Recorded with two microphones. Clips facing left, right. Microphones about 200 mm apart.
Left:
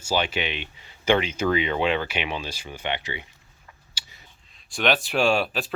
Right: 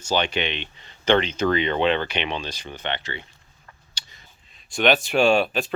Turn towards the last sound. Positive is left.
turn(degrees=0)  # may be behind; listen again after turning